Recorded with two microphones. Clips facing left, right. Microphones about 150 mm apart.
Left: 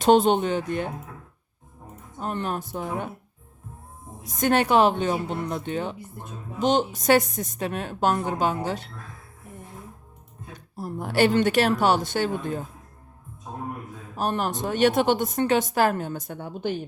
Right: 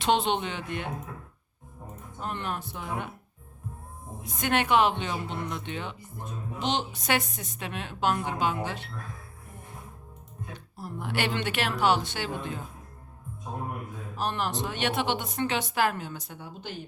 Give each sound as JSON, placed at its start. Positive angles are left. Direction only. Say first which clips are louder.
{"t": 0.0, "sound": "speech", "louder": "left 8 dB", "side_deg": 45}
{"t": 2.1, "sound": "a woman's voice", "louder": "left 5 dB", "side_deg": 40}
{"t": 4.2, "sound": "a woman's voice", "louder": "left 6 dB", "side_deg": 40}
{"t": 10.5, "sound": "speech", "louder": "left 7 dB", "side_deg": 40}
{"t": 14.2, "sound": "speech", "louder": "left 4 dB", "side_deg": 45}